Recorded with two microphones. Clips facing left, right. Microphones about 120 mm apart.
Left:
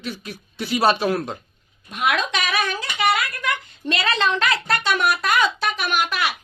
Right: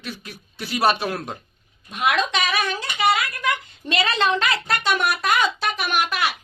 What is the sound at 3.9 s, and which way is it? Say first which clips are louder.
A woman's voice: right 1 dB; centre (ahead or behind).